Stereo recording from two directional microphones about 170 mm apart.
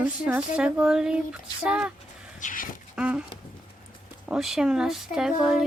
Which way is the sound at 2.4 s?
55° left (ahead or behind).